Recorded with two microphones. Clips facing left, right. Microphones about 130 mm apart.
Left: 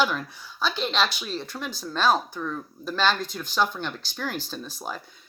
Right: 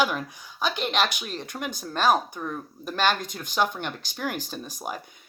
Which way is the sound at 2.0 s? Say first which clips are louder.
Even; 15° right (ahead or behind).